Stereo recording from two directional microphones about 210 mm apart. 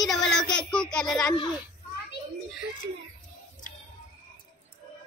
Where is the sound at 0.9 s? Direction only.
5° left (ahead or behind).